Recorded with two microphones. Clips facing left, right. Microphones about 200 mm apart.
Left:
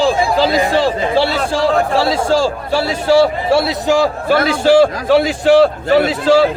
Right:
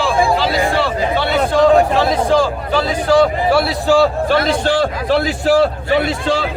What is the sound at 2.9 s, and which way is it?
A man's voice, 25° left (ahead or behind).